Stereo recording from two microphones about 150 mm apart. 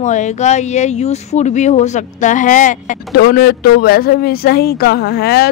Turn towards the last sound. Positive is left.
turn(degrees=90)